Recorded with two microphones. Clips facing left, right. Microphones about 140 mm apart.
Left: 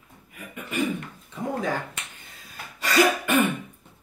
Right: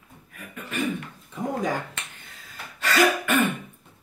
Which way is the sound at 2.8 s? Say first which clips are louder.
Even; 10° left (ahead or behind).